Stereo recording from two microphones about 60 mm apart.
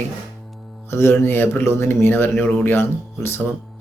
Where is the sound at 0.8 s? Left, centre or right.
Left.